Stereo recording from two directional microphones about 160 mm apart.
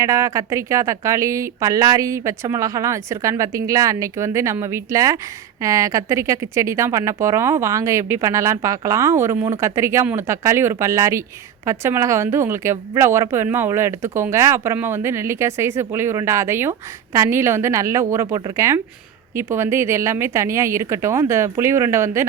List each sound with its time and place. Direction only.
0.0 s a woman's voice: 20° right (ahead or behind)